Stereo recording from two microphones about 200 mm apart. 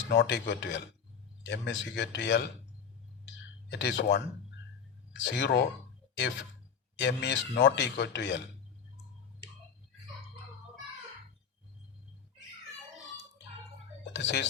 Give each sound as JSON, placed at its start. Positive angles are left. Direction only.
{"t": 0.1, "sound": "speech", "side_deg": 60}
{"t": 3.7, "sound": "speech", "side_deg": 60}
{"t": 14.0, "sound": "a sound", "side_deg": 60}